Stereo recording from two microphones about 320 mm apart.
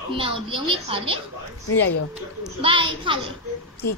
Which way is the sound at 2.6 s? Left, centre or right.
Centre.